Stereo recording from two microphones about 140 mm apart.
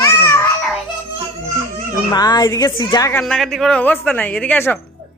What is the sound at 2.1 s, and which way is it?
Speech, 30° left (ahead or behind).